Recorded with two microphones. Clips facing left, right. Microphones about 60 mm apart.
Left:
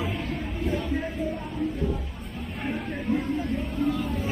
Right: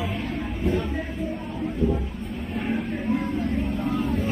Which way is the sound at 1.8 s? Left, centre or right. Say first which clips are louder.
Right 10 dB; right.